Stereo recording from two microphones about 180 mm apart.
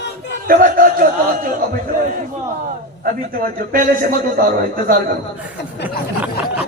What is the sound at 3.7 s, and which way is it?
A man's voice, 50° right (ahead or behind).